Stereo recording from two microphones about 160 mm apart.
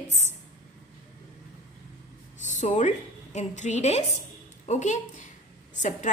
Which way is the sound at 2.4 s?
50° left (ahead or behind).